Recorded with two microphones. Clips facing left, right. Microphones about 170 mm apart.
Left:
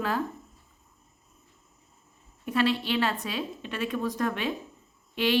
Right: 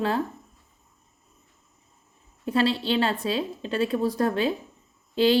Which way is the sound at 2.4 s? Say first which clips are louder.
Right 3 dB; 30° right (ahead or behind).